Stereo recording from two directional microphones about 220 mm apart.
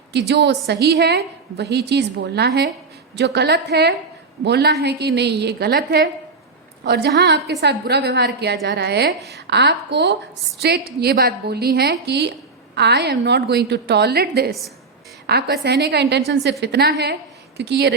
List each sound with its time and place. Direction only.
0.1 s a woman's voice: 50° right (ahead or behind)